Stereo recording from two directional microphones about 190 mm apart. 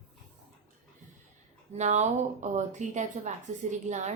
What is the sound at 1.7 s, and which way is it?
Speech, 35° right (ahead or behind).